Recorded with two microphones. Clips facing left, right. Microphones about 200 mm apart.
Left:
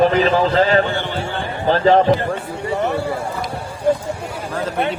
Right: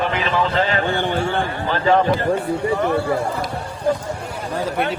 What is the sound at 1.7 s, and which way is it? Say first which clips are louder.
Speech: left 4 dB; 35° left (ahead or behind).